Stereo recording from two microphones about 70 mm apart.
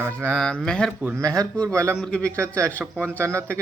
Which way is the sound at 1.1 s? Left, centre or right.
Right.